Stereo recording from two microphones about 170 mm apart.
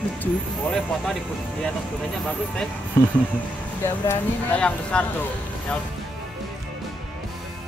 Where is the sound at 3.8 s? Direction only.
10° left (ahead or behind).